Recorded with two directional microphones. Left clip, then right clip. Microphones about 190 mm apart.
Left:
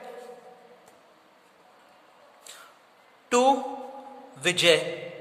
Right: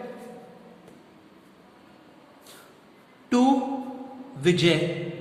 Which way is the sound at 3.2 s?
55° left (ahead or behind).